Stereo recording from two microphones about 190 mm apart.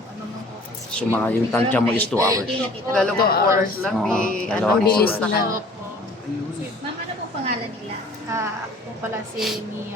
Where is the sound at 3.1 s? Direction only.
55° left (ahead or behind).